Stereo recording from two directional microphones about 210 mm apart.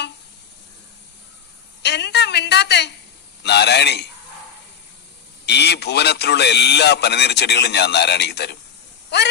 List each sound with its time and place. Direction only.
1.8 s a sound: 55° left (ahead or behind)
3.4 s a man's voice: 55° left (ahead or behind)
5.5 s a man's voice: 50° left (ahead or behind)